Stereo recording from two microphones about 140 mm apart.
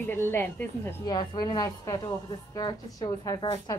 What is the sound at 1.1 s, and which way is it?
A woman's voice, 30° left (ahead or behind).